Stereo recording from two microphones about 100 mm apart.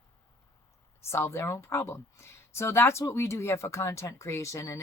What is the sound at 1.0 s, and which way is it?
Speech, 25° left (ahead or behind).